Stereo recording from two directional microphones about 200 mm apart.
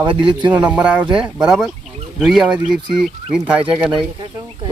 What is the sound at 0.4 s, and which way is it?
Speech, 5° right (ahead or behind).